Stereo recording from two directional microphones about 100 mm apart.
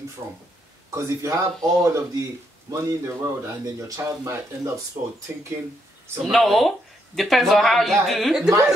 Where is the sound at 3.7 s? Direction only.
35° right (ahead or behind).